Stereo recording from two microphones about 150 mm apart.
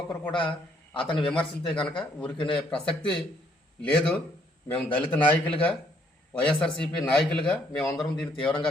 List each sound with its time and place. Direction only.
0.3 s a man's voice: 35° left (ahead or behind)
1.2 s a man's voice: 5° left (ahead or behind)